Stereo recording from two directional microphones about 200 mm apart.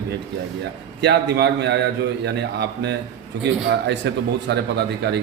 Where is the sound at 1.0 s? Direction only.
55° right (ahead or behind).